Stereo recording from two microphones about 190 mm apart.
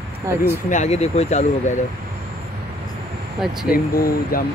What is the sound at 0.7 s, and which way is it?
Speech, 35° left (ahead or behind).